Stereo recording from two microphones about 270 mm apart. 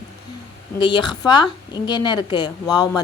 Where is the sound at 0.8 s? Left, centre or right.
Centre.